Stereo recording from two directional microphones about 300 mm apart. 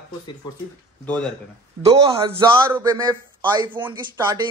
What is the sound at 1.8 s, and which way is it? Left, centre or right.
Speech, centre.